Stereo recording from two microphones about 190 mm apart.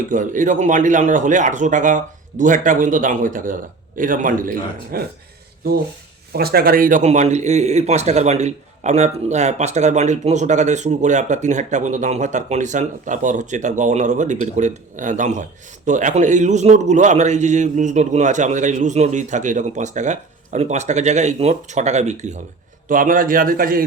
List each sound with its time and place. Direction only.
0.1 s a man's voice: 40° right (ahead or behind)
6.3 s a man's voice: 55° right (ahead or behind)